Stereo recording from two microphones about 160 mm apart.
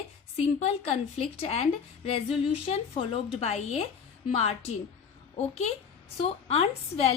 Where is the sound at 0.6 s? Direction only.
40° left (ahead or behind).